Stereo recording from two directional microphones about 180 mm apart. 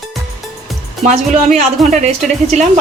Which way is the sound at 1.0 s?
40° right (ahead or behind).